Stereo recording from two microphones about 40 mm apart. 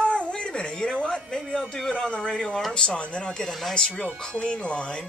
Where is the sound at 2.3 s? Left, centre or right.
Centre.